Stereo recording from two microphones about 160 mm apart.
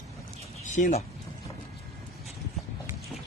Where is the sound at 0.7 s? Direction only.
50° left (ahead or behind).